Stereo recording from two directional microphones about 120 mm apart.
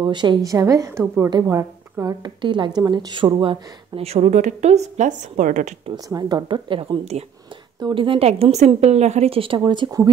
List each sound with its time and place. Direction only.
0.0 s a woman's voice: 40° right (ahead or behind)
2.2 s a woman's voice: 40° right (ahead or behind); by 5.8 s 90° right
5.9 s a woman's voice: 30° right (ahead or behind)